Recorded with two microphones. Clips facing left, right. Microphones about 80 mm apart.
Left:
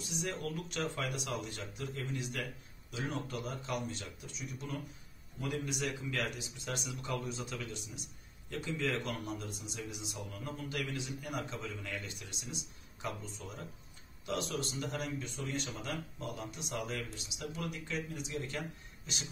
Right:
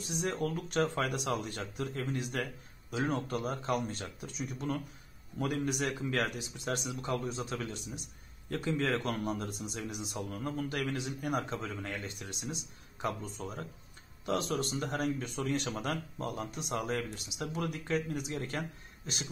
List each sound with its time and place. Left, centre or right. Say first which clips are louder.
0.0 s speech: right 5 dB; right
14.2 s speech: right 5 dB; right